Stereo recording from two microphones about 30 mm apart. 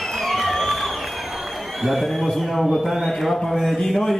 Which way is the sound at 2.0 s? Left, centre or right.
Centre.